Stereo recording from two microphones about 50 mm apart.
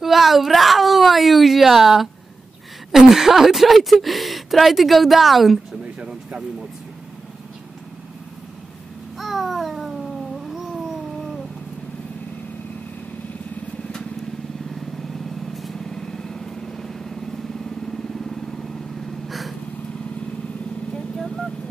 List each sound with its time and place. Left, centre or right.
0.0 s speech: centre
5.8 s speech: centre
9.2 s babbling: centre
10.4 s cat: centre
14.7 s vehicle: centre
20.9 s vehicle: centre